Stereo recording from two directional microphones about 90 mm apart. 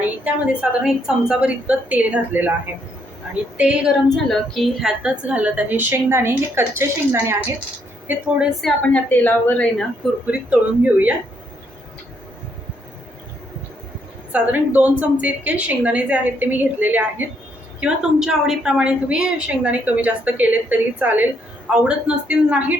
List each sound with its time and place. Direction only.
0.0 s a woman's voice: 10° right (ahead or behind)
3.6 s a woman's voice: 10° right (ahead or behind)
4.1 s a woman's voice: 5° left (ahead or behind); by 7.3 s 30° right (ahead or behind)
8.0 s a woman's voice: 10° right (ahead or behind)
8.8 s speech: 15° left (ahead or behind)
10.2 s a woman's voice: 15° right (ahead or behind)
14.3 s a woman's voice: 15° right (ahead or behind)
17.7 s a woman's voice: 10° right (ahead or behind)